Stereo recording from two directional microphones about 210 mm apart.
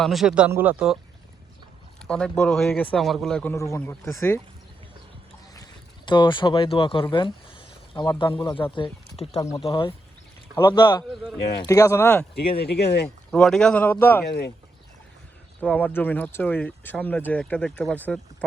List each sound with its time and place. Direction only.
0.0 s speech: centre (ahead or behind)
2.0 s speech: 5° left (ahead or behind)
6.1 s speech: 20° left (ahead or behind)
11.1 s speech: centre (ahead or behind)
11.6 s speech: 15° left (ahead or behind)
12.3 s speech: 50° left (ahead or behind)
13.3 s speech: 5° left (ahead or behind)
15.6 s speech: 5° left (ahead or behind)